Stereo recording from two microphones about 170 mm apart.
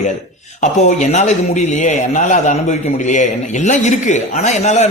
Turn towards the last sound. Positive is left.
turn(degrees=40)  # may be behind; listen again after turning